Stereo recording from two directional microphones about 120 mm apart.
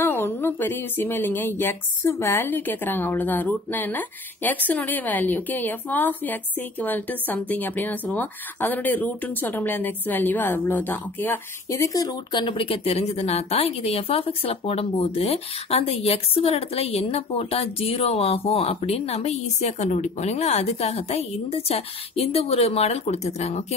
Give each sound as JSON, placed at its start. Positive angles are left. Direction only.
{"t": 0.0, "sound": "a woman's voice", "side_deg": 15}